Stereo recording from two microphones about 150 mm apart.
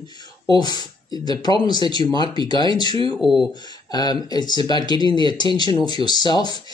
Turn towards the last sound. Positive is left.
turn(degrees=30)  # may be behind; listen again after turning